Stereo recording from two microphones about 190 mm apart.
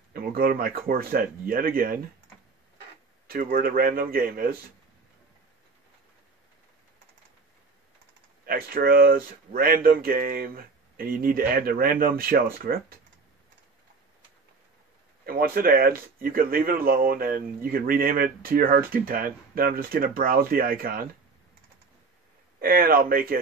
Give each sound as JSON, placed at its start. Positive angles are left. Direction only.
{"t": 0.1, "sound": "a man's voice", "side_deg": -50}
{"t": 3.3, "sound": "a man's voice", "side_deg": -50}
{"t": 8.5, "sound": "a man's voice", "side_deg": -50}
{"t": 15.2, "sound": "a man's voice", "side_deg": -50}
{"t": 22.6, "sound": "a man's voice", "side_deg": -50}